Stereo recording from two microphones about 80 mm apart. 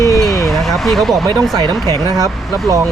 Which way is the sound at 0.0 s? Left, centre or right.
Left.